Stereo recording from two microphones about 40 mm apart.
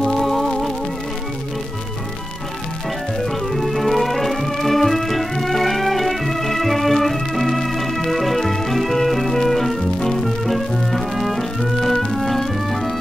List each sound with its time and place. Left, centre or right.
0.0 s music: centre
3.2 s music: centre